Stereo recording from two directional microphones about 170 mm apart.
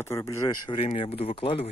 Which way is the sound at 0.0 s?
15° left (ahead or behind).